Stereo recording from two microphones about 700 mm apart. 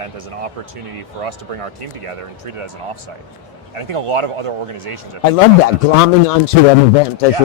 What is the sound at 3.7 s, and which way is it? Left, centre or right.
Speech, right.